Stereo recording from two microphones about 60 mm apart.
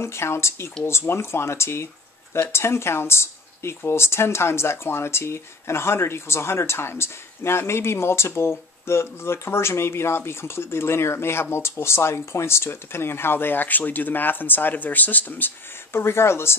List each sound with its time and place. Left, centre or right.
0.0 s speech: left
16.0 s speech: left